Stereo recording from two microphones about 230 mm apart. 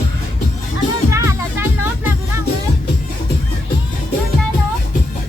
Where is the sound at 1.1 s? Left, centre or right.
Centre.